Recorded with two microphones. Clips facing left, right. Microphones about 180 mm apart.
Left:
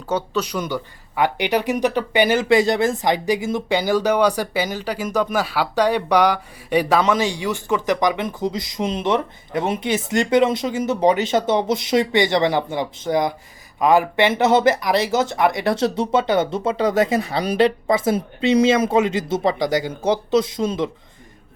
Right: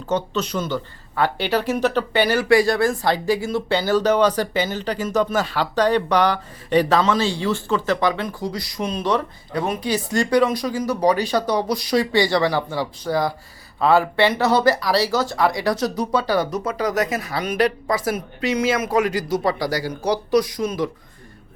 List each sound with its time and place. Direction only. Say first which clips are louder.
0.1 s speech: even; 10° left (ahead or behind)